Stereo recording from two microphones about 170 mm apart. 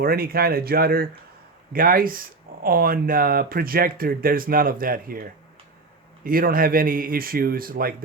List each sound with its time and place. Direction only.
0.0 s speech: 60° right (ahead or behind)